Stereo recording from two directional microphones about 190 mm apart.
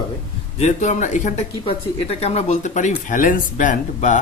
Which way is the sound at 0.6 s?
40° left (ahead or behind).